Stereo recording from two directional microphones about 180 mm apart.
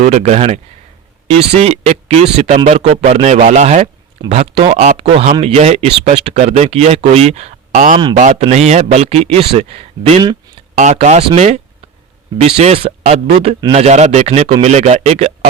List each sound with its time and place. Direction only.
0.0 s speech: 40° right (ahead or behind)
10.8 s speech: 40° right (ahead or behind)